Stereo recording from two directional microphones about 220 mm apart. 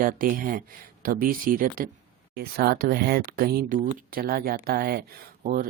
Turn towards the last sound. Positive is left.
turn(degrees=-40)  # may be behind; listen again after turning